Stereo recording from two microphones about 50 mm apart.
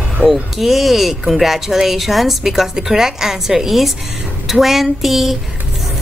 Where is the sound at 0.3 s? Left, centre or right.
Centre.